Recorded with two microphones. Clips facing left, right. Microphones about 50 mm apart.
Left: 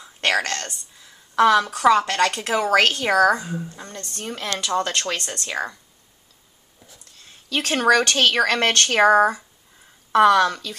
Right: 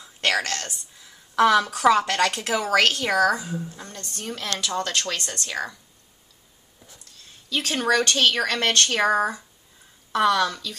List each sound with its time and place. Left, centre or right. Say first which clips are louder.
0.0 s a woman's voice: left 2 dB; centre
2.7 s speech: left 2 dB; centre
5.2 s speech: left 1 dB; centre
7.4 s speech: left 5 dB; left
8.8 s speech: left 6 dB; left